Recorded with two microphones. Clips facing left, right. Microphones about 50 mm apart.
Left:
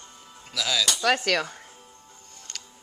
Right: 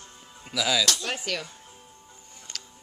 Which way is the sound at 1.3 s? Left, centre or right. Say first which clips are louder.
Left 7 dB; left.